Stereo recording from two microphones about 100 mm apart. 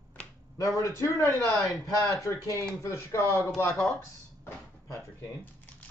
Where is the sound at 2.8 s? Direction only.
30° left (ahead or behind).